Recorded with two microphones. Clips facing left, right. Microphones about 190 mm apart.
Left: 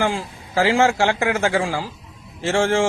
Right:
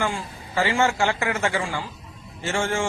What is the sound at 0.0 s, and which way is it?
A man's voice, 90° left.